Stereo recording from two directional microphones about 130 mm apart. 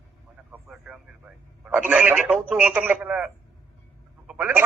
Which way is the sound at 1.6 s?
10° right (ahead or behind).